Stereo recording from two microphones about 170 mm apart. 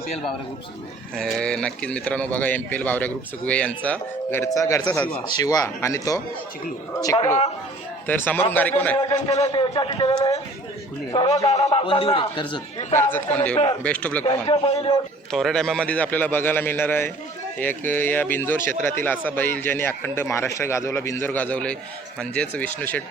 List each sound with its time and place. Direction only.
1.1 s speech: 5° left (ahead or behind)
4.9 s speech: 10° left (ahead or behind)
5.4 s speech: 20° left (ahead or behind)
9.0 s a man's voice: 25° left (ahead or behind)
12.9 s speech: 15° left (ahead or behind)
14.3 s a man's voice: 30° left (ahead or behind)
15.3 s speech: centre (ahead or behind)